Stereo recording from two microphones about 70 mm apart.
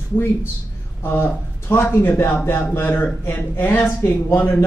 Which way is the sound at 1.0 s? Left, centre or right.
Left.